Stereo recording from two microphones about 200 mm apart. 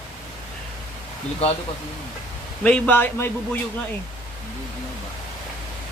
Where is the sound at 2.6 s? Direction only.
10° left (ahead or behind).